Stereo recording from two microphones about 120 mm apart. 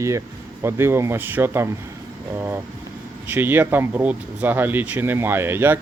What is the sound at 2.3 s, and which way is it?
Vehicle, 20° right (ahead or behind).